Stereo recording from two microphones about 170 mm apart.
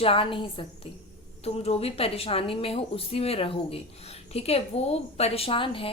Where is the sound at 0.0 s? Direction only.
30° left (ahead or behind).